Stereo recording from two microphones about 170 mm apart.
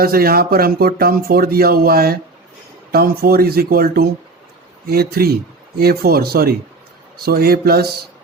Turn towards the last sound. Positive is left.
turn(degrees=-65)  # may be behind; listen again after turning